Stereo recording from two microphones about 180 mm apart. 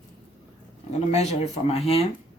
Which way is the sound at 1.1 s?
35° left (ahead or behind).